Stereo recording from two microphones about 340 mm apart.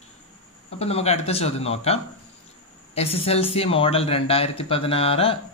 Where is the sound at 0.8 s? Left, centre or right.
Centre.